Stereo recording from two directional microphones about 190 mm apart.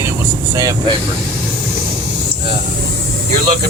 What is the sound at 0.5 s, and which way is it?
Speech, 15° right (ahead or behind).